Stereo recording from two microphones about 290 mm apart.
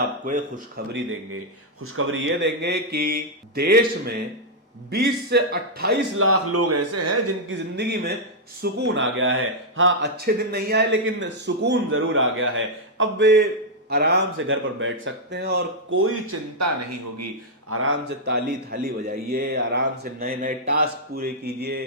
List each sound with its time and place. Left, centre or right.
0.3 s speech: right
1.8 s a man's voice: right
7.4 s speech: right
17.7 s speech: right